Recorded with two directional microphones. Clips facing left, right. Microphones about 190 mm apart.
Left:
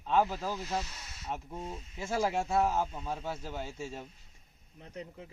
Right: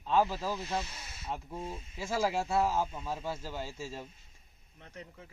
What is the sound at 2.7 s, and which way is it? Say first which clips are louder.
Speech: even; 15° left (ahead or behind).